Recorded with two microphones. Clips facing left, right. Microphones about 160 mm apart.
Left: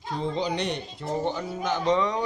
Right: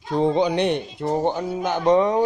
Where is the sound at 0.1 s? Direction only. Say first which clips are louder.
Right 9 dB; 65° right (ahead or behind).